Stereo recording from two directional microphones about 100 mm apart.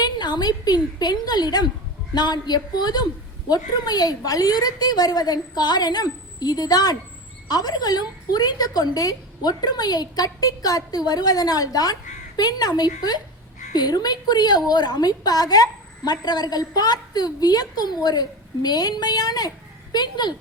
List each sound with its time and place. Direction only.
0.0 s a woman's voice: 45° left (ahead or behind)